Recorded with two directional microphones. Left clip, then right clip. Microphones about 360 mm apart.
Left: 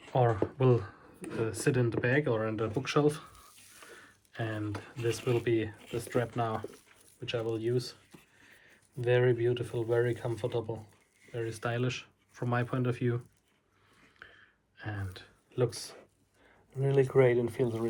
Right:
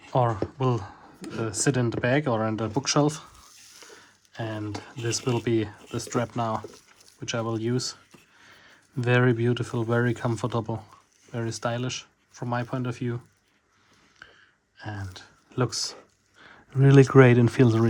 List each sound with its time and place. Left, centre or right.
0.1 s speech: centre
9.0 s speech: centre
14.2 s a sound: centre
14.8 s speech: centre
17.4 s speech: right